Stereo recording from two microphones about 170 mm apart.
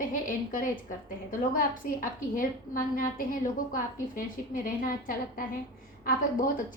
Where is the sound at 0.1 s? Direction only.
50° left (ahead or behind).